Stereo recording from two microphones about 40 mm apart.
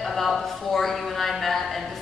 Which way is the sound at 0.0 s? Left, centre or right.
Centre.